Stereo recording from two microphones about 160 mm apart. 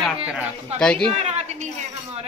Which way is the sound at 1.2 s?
45° right (ahead or behind).